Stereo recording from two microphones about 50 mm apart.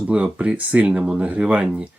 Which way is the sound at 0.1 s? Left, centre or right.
Right.